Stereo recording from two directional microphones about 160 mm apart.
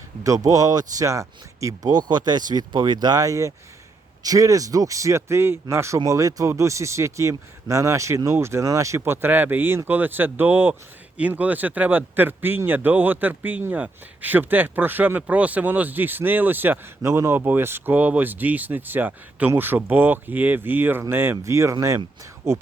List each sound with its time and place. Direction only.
0.2 s speech: 20° right (ahead or behind)